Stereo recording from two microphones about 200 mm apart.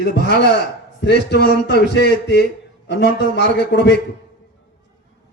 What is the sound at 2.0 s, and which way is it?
A man's voice, 55° left (ahead or behind).